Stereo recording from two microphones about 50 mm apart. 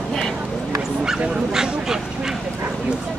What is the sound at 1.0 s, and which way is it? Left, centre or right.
Speech, centre.